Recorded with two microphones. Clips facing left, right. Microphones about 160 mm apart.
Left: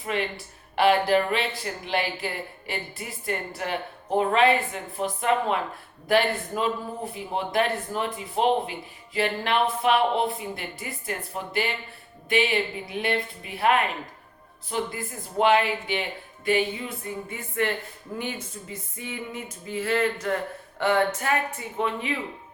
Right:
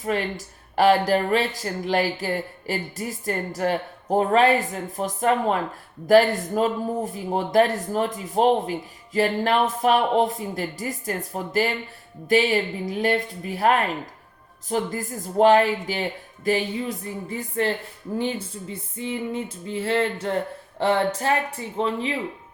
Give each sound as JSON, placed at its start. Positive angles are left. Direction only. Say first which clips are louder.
{"t": 0.0, "sound": "speech", "louder": "right 3 dB", "side_deg": -40}
{"t": 18.2, "sound": "music", "louder": "right 6 dB", "side_deg": -30}